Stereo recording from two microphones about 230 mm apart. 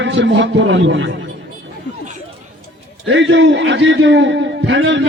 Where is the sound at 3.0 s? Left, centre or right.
Right.